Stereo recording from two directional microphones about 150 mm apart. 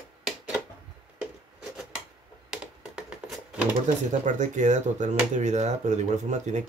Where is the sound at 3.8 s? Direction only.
55° right (ahead or behind).